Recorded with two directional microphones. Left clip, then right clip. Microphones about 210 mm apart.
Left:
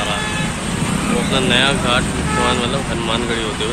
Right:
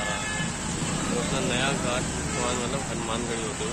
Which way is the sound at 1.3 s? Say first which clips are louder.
Left 14 dB; 5° right (ahead or behind).